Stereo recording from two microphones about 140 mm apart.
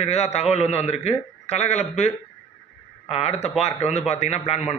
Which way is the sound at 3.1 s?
50° left (ahead or behind).